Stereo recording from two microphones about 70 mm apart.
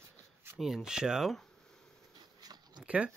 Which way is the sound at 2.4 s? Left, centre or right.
Right.